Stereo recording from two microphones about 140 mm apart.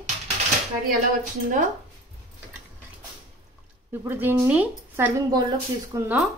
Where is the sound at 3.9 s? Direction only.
15° right (ahead or behind).